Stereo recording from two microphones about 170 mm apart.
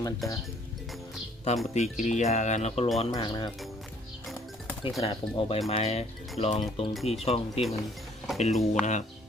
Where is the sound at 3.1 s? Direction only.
25° left (ahead or behind).